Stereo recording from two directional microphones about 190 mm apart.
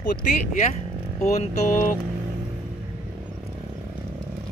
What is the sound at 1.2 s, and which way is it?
Speech, 35° left (ahead or behind).